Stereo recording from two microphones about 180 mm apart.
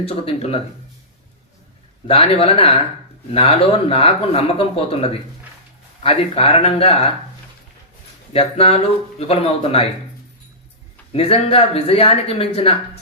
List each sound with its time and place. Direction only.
0.0 s speech: 35° left (ahead or behind)
2.0 s speech: 35° left (ahead or behind)
8.3 s speech: 30° left (ahead or behind)
11.1 s speech: 35° left (ahead or behind)